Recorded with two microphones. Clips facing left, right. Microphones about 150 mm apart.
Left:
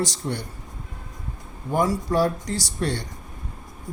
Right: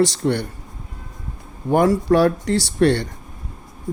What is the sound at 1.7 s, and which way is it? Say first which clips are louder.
Speech: right 7 dB; 70° right (ahead or behind).